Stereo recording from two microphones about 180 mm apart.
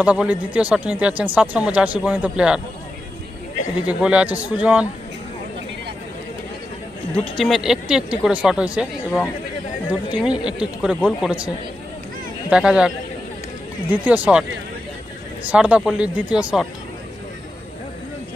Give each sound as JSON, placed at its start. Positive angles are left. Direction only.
{"t": 0.0, "sound": "speech", "side_deg": -5}
{"t": 3.8, "sound": "speech", "side_deg": -5}
{"t": 7.3, "sound": "speech", "side_deg": 0}
{"t": 10.2, "sound": "speech", "side_deg": -5}
{"t": 15.4, "sound": "speech", "side_deg": -5}